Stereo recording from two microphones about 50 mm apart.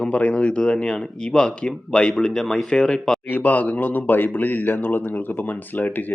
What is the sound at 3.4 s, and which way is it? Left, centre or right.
A man's voice, left.